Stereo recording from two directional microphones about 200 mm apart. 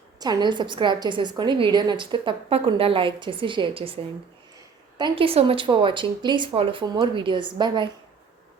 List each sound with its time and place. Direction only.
0.2 s a woman's voice: 20° right (ahead or behind)